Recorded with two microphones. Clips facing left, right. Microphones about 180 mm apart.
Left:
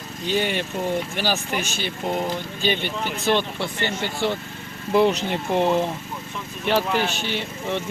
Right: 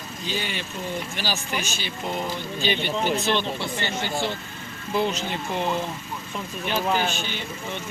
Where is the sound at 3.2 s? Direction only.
50° left (ahead or behind).